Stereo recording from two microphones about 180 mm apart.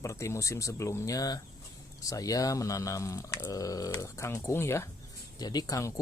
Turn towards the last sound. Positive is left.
turn(degrees=20)  # may be behind; listen again after turning